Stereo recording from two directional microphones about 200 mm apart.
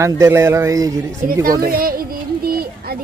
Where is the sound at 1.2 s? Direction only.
45° right (ahead or behind).